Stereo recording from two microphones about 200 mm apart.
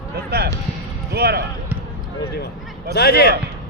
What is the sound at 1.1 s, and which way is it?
Speech, 55° right (ahead or behind).